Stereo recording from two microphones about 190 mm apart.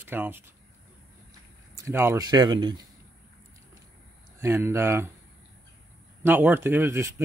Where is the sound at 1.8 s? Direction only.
15° right (ahead or behind).